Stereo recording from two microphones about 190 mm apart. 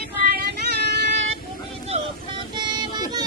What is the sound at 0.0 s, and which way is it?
Vehicle, 55° right (ahead or behind).